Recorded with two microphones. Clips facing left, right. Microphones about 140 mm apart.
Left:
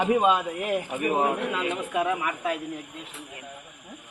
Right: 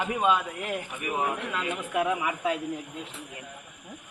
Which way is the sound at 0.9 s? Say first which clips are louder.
Left 5 dB; 35° left (ahead or behind).